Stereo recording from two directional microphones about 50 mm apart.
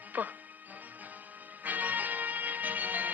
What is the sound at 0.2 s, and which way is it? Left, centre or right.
Speech, right.